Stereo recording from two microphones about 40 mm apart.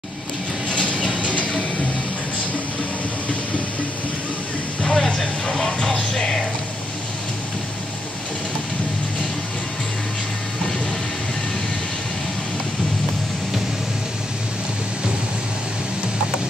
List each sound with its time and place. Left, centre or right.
1.2 s train: left
4.8 s vehicle: centre